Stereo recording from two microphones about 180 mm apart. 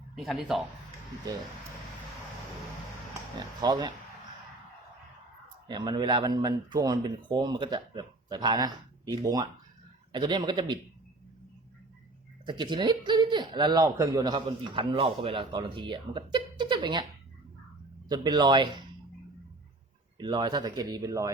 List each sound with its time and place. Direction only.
0.2 s speech: centre (ahead or behind)
3.6 s speech: 25° right (ahead or behind)
5.6 s speech: 25° right (ahead or behind)
12.5 s speech: 25° right (ahead or behind)
18.1 s speech: 25° right (ahead or behind)
20.1 s speech: 25° right (ahead or behind)